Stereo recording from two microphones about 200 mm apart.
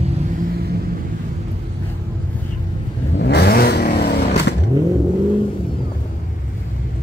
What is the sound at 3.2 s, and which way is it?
Vehicle, 55° left (ahead or behind).